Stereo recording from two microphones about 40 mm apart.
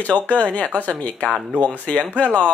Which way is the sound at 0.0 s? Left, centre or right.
Left.